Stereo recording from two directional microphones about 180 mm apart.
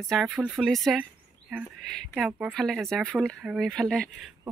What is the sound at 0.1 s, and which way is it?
Speech, 5° right (ahead or behind).